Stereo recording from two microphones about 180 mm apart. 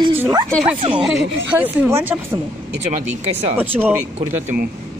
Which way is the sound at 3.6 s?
10° right (ahead or behind).